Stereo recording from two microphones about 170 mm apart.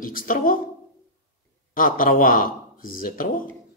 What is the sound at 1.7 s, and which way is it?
A man's voice, 55° left (ahead or behind).